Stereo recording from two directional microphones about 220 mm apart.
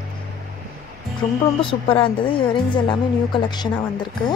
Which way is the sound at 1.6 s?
25° left (ahead or behind).